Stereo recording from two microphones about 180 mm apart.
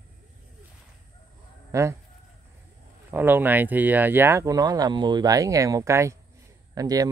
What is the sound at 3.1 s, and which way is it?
Speech, 10° right (ahead or behind).